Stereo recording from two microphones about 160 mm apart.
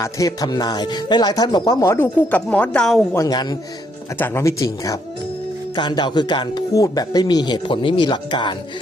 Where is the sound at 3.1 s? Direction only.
20° left (ahead or behind).